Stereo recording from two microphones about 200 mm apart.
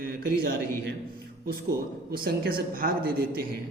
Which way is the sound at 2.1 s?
50° right (ahead or behind).